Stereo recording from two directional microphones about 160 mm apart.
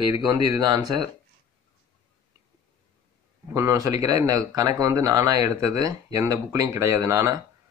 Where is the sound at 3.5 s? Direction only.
20° right (ahead or behind).